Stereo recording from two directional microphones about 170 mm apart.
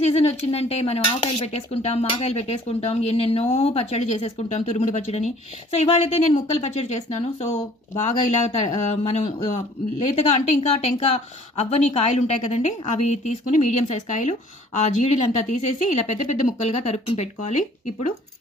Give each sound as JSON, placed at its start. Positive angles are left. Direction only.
{"t": 0.0, "sound": "speech", "side_deg": 40}
{"t": 15.4, "sound": "speech", "side_deg": 45}